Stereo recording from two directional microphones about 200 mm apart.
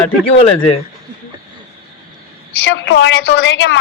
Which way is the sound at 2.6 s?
70° left (ahead or behind).